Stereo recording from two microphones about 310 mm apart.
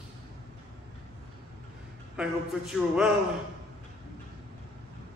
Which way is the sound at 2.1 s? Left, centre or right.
Centre.